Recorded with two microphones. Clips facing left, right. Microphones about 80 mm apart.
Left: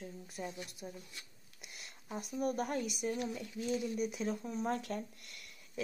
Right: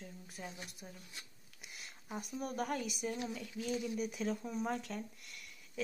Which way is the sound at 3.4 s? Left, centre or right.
Left.